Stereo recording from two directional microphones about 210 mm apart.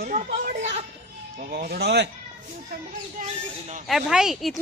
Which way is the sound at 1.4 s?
45° right (ahead or behind).